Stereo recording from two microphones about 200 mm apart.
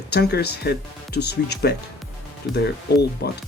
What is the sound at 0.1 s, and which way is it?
Speech, 55° left (ahead or behind).